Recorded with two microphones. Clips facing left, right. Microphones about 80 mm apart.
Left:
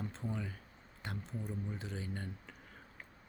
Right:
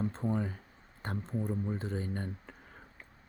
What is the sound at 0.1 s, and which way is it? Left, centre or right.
Speech, right.